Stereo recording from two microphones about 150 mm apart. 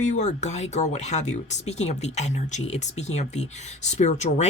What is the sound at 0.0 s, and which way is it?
Speech, 55° left (ahead or behind).